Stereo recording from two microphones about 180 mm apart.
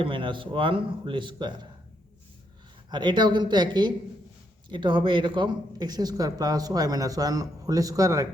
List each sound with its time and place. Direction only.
0.0 s speech: 30° right (ahead or behind)
2.9 s speech: 25° right (ahead or behind)